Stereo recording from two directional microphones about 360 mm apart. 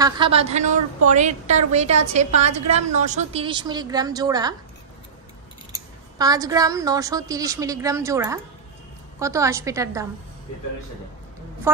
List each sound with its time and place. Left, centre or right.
0.0 s a woman's voice: centre
5.7 s a woman's voice: centre
11.7 s music: centre